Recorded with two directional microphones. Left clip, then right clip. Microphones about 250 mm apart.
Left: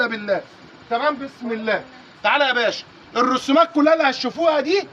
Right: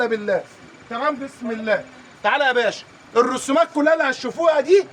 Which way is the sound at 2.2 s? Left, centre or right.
Right.